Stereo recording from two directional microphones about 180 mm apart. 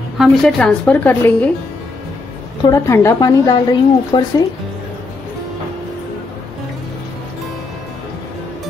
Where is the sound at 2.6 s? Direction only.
15° left (ahead or behind).